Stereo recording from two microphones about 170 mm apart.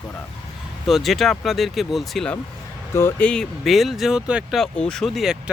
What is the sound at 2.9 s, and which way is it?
Speech, 10° left (ahead or behind).